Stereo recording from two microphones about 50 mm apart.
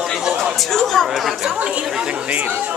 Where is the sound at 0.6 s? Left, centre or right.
Centre.